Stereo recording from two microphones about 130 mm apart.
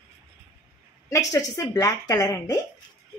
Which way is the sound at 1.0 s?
25° left (ahead or behind).